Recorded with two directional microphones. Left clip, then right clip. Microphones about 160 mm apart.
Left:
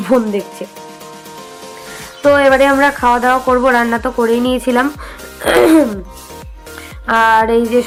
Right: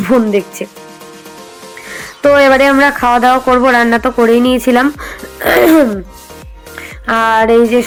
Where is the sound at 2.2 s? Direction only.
30° right (ahead or behind).